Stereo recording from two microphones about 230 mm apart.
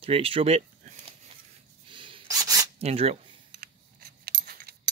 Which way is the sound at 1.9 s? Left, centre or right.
Right.